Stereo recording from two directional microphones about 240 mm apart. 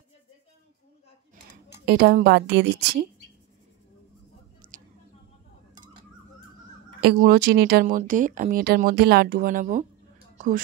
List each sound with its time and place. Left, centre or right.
1.9 s a woman's voice: right
4.6 s a sound: right
7.0 s speech: right